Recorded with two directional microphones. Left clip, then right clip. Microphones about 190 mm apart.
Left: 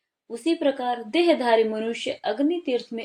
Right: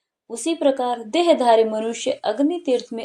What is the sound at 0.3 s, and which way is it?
A woman's voice, 25° right (ahead or behind).